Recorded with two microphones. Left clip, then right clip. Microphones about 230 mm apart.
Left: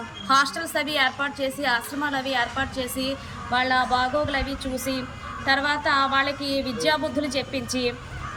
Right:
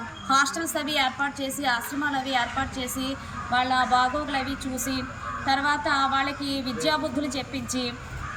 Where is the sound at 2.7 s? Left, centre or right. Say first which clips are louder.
Left 3 dB; left.